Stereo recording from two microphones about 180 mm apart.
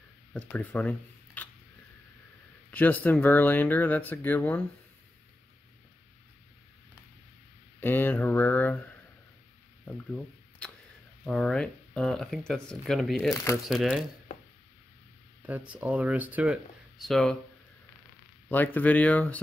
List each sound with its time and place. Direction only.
0.3 s speech: 5° left (ahead or behind)
2.7 s speech: 10° left (ahead or behind)
7.8 s a sound: 10° left (ahead or behind)
9.8 s camera: 5° left (ahead or behind)
11.2 s speech: 5° left (ahead or behind)
13.3 s speech: 15° left (ahead or behind)
13.7 s speech: centre (ahead or behind)
15.4 s speech: 10° right (ahead or behind)
17.0 s speech: centre (ahead or behind)
18.5 s speech: 10° left (ahead or behind)